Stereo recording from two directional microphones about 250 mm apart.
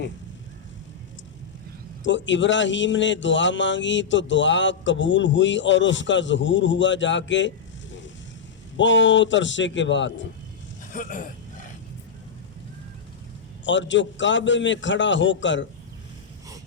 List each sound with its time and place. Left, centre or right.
2.0 s speech: left
10.9 s speech: left
13.7 s speech: left